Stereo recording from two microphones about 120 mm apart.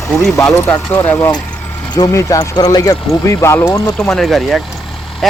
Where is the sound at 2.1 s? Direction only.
25° left (ahead or behind).